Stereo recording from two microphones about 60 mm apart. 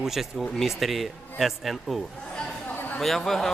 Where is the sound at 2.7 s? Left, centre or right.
Left.